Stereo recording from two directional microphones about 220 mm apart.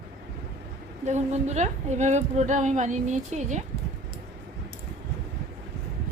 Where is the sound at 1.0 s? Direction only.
30° right (ahead or behind).